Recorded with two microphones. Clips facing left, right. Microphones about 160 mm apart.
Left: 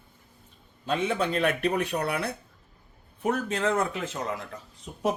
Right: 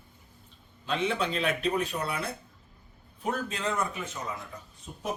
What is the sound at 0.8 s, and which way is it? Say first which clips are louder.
Speech: left 2 dB; 50° left (ahead or behind).